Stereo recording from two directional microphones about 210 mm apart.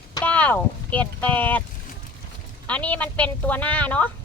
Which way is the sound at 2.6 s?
5° left (ahead or behind).